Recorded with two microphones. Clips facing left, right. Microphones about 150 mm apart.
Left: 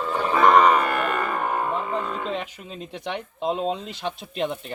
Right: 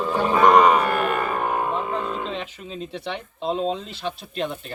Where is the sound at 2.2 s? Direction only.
10° left (ahead or behind).